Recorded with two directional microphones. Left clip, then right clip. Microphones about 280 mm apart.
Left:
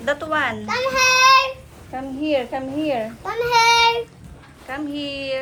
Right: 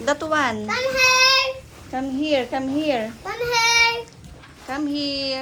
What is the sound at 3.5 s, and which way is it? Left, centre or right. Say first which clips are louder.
Child singing: left 3 dB; left.